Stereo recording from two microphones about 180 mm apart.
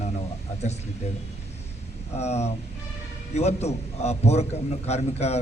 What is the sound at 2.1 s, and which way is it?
A man's voice, 35° left (ahead or behind).